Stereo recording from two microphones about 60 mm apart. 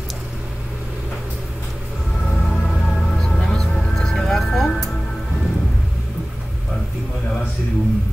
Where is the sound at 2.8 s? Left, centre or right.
Centre.